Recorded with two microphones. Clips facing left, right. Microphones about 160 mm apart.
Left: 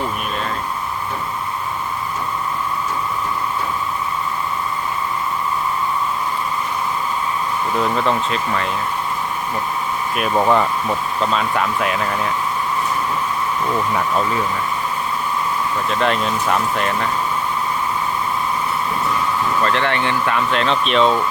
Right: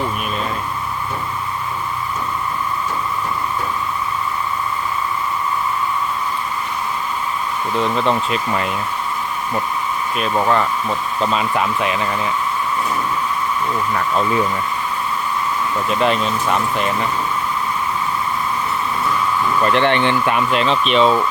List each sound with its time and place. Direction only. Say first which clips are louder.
7.8 s speech: right 1 dB; 5° left (ahead or behind)
10.2 s speech: left 2 dB; 10° left (ahead or behind)
11.2 s speech: right 2 dB; 5° right (ahead or behind)
15.9 s speech: right 2 dB; centre (ahead or behind)
19.6 s speech: right 6 dB; 20° right (ahead or behind)
20.5 s speech: right 1 dB; 5° right (ahead or behind)